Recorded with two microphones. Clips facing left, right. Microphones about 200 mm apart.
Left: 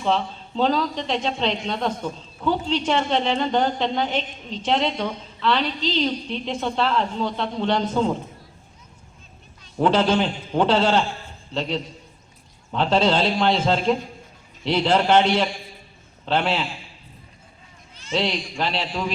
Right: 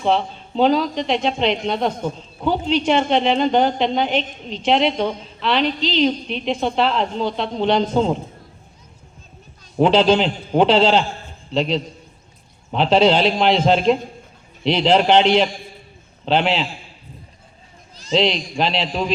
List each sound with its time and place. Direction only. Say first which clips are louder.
0.0 s a man's voice: right 4 dB; 20° right (ahead or behind)
9.8 s a man's voice: right 4 dB; 15° right (ahead or behind)
18.1 s speech: right 6 dB; 20° right (ahead or behind)